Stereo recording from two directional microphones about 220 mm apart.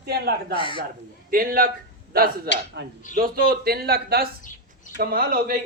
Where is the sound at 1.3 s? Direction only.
40° right (ahead or behind).